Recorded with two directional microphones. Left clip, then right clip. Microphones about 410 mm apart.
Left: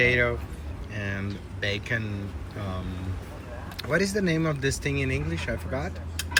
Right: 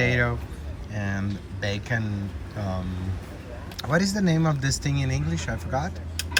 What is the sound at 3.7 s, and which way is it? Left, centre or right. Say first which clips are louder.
Speech: even; centre.